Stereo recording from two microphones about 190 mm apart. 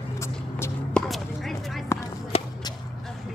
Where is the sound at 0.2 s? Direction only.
15° left (ahead or behind).